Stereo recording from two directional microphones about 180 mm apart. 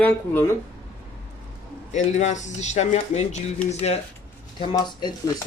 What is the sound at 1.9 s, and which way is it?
Speech, 40° left (ahead or behind).